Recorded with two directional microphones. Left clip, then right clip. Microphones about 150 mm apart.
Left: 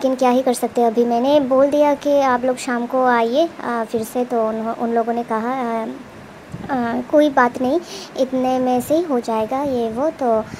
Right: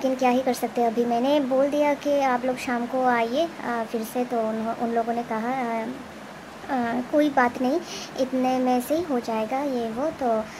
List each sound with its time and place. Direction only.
0.0 s speech: 25° left (ahead or behind)